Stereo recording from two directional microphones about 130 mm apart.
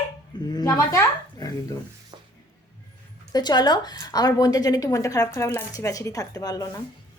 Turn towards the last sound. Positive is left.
turn(degrees=30)  # may be behind; listen again after turning